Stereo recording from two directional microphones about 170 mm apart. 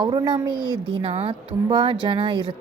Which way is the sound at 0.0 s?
25° right (ahead or behind).